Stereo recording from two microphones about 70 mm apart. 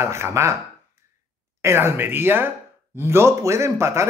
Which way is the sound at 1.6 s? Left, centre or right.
Right.